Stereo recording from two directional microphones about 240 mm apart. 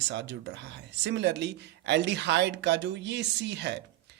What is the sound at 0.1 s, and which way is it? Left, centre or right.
Speech, right.